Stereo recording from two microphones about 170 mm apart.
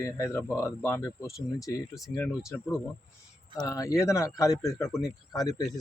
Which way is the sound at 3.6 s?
20° left (ahead or behind).